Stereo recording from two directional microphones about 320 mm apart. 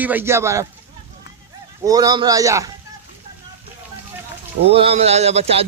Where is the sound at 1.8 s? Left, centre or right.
Centre.